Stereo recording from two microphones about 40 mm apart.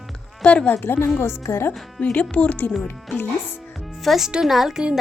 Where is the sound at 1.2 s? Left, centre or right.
Left.